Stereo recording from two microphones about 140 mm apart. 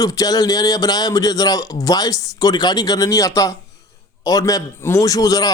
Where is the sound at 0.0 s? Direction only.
25° left (ahead or behind).